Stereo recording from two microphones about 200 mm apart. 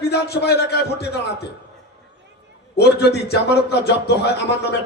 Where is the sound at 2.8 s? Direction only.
55° left (ahead or behind).